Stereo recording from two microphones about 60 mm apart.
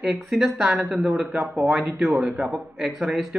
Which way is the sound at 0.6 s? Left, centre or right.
Right.